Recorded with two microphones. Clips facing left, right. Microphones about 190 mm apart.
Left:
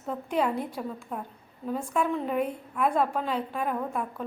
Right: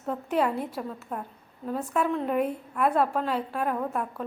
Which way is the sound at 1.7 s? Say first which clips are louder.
Right 1 dB; 10° left (ahead or behind).